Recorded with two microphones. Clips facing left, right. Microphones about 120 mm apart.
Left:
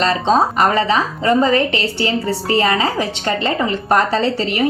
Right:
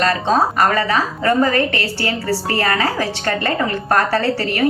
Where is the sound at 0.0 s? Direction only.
25° left (ahead or behind).